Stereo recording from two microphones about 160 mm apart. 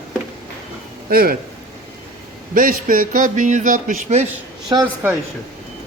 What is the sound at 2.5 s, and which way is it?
A man's voice, 60° right (ahead or behind).